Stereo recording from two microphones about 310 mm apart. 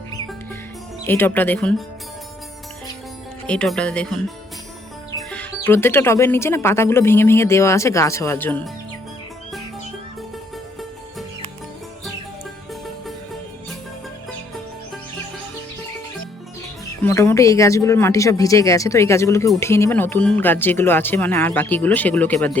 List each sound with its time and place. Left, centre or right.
1.0 s speech: centre
3.4 s speech: centre
5.1 s speech: centre
17.0 s speech: centre